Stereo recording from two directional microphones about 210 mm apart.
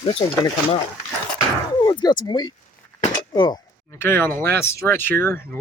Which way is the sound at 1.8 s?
20° left (ahead or behind).